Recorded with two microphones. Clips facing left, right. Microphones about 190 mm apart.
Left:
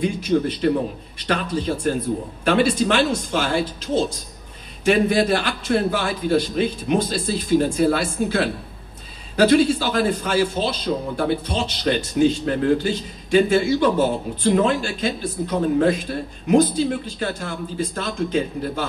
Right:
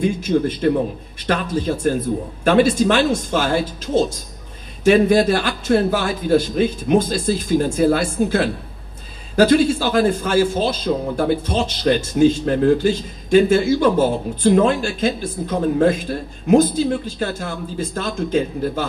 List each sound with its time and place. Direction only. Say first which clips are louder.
0.0 s a man's voice: right 2 dB; 45° right (ahead or behind)